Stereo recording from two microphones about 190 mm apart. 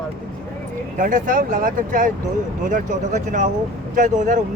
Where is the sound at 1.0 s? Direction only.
45° right (ahead or behind).